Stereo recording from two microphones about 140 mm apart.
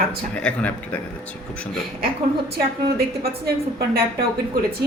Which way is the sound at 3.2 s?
90° right.